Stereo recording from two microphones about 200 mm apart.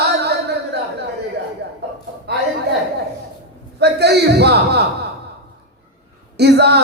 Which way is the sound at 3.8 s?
55° right (ahead or behind).